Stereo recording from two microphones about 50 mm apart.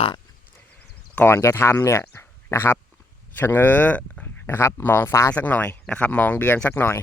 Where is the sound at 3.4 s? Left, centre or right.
Left.